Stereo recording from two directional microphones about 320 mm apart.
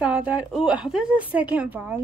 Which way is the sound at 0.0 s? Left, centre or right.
Centre.